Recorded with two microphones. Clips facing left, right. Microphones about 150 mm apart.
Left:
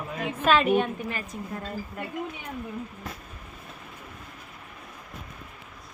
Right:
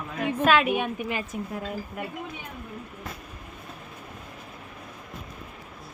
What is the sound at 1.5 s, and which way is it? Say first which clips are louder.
Speech: right 2 dB; 5° right (ahead or behind).